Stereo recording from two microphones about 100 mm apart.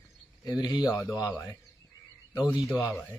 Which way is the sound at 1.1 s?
10° right (ahead or behind).